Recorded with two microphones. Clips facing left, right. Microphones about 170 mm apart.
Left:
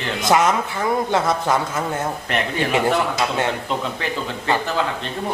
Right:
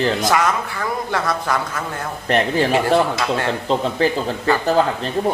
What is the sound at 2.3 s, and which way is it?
A man's voice, 35° right (ahead or behind).